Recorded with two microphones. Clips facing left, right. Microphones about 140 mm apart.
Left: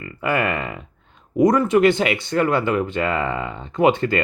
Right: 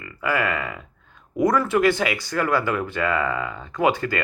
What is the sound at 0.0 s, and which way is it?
Speech, 30° left (ahead or behind).